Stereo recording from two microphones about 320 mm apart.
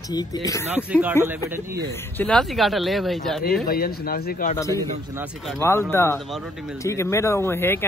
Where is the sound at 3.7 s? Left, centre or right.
Left.